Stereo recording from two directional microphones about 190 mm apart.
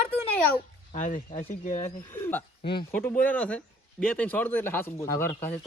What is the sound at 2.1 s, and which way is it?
Speech, 10° left (ahead or behind).